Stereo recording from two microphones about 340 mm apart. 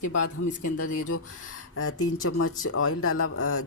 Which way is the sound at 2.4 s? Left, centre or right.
Left.